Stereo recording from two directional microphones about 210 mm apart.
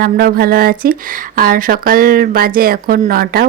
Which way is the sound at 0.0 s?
45° right (ahead or behind).